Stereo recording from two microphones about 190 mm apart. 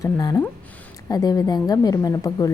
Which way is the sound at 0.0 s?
20° left (ahead or behind).